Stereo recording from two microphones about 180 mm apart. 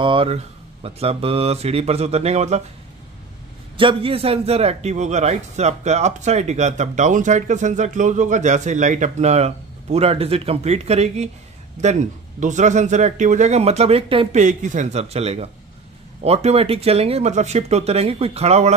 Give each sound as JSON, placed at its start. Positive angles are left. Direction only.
{"t": 0.0, "sound": "a man's voice", "side_deg": -30}
{"t": 3.7, "sound": "a man's voice", "side_deg": -30}